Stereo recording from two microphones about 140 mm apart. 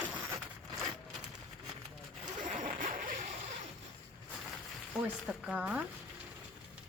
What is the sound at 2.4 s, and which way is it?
Zipper, 65° right (ahead or behind).